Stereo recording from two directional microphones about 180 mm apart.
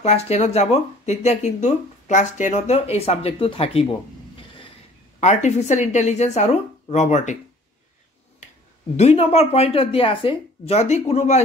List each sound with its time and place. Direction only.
0.0 s speech: 35° left (ahead or behind)
4.4 s a sound: 30° left (ahead or behind)
5.2 s speech: 40° left (ahead or behind)
8.9 s speech: 35° left (ahead or behind)